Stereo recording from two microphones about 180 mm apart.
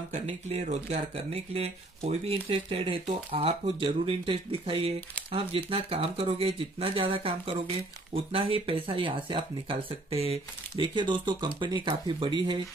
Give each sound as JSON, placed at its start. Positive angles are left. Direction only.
{"t": 0.1, "sound": "speech", "side_deg": -40}